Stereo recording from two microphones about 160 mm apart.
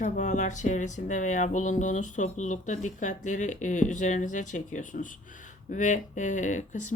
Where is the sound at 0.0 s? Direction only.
50° left (ahead or behind).